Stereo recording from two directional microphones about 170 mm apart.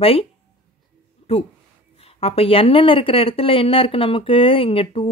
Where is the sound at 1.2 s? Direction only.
35° left (ahead or behind).